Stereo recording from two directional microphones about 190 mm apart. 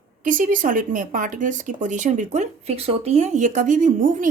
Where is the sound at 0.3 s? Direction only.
45° right (ahead or behind).